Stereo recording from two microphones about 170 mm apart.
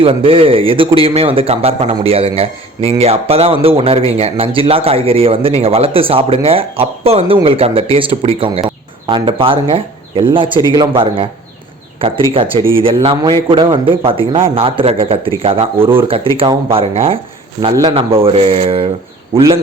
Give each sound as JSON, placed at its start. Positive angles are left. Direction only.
{"t": 0.0, "sound": "a man's voice", "side_deg": -35}